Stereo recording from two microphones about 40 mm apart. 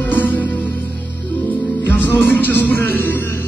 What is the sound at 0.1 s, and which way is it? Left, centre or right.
Music, left.